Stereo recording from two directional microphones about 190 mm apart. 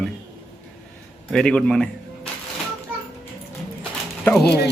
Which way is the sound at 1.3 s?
5° left (ahead or behind).